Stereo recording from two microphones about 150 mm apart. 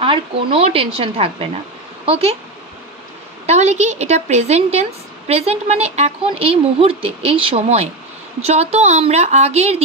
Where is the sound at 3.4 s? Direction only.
45° right (ahead or behind).